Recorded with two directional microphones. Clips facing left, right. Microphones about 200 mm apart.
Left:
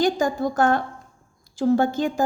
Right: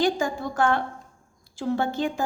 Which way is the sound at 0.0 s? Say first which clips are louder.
Left 3 dB; 40° left (ahead or behind).